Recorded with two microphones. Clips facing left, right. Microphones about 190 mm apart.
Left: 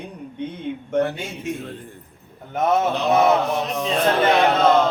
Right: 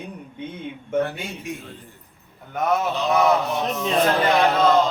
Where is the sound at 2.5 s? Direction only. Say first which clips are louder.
Left 3 dB; 25° left (ahead or behind).